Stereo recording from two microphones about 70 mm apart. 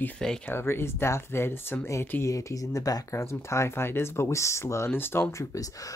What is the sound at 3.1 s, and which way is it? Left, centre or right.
Speech, left.